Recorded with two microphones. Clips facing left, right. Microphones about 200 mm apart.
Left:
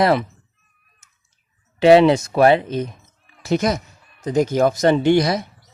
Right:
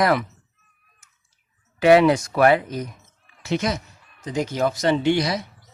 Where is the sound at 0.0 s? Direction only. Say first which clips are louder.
Left 3 dB; 25° left (ahead or behind).